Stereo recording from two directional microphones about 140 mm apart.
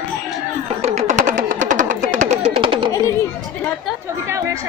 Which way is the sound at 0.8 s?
55° right (ahead or behind).